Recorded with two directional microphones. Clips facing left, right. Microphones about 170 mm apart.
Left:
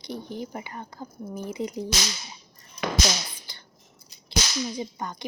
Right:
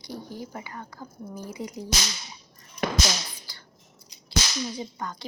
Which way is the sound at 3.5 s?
20° left (ahead or behind).